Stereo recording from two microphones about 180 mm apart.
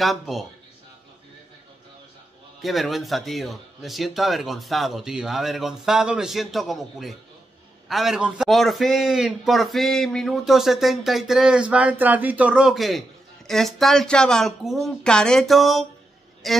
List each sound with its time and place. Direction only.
0.0 s a man's voice: centre (ahead or behind)
2.6 s a man's voice: centre (ahead or behind)